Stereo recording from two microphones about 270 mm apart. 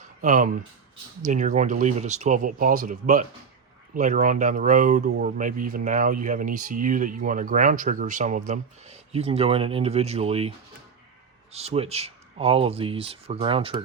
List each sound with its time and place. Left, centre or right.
0.2 s speech: right
11.5 s speech: right